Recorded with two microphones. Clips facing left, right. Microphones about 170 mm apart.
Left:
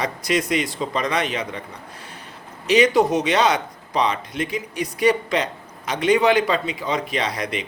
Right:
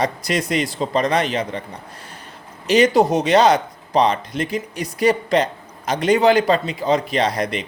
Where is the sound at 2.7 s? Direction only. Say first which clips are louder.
Right 2 dB; 35° right (ahead or behind).